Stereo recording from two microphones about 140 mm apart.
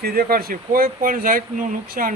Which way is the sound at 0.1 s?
90° right.